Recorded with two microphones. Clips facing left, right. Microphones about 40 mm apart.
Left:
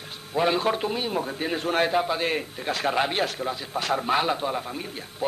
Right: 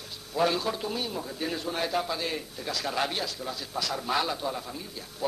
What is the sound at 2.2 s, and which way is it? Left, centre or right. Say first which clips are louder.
A man's voice: left 6 dB; left.